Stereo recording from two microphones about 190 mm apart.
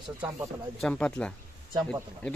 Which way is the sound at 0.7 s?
5° left (ahead or behind).